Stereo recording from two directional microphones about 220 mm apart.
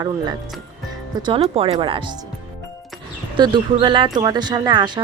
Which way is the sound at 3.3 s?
20° right (ahead or behind).